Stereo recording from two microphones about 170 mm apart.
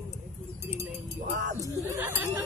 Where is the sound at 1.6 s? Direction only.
15° right (ahead or behind).